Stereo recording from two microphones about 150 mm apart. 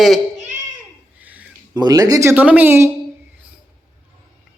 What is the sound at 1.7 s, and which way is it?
A man's voice, 25° right (ahead or behind).